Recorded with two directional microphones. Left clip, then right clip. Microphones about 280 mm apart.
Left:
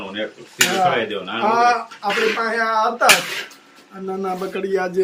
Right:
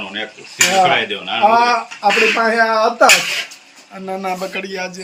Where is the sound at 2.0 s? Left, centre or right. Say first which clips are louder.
Right 6 dB; right.